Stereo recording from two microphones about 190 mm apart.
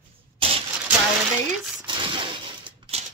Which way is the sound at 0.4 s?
30° right (ahead or behind).